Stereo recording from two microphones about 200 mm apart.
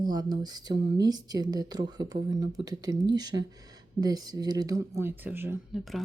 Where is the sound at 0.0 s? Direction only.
20° right (ahead or behind).